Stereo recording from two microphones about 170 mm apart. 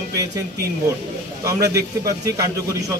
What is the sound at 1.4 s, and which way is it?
A man's voice, 20° right (ahead or behind).